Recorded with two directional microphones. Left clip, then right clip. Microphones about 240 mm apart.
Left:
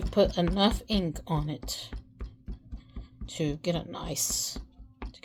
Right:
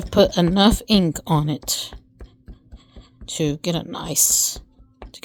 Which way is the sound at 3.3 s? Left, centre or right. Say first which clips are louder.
Right 8 dB; right.